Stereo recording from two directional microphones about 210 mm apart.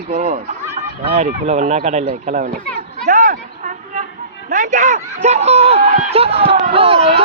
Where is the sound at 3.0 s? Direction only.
40° right (ahead or behind).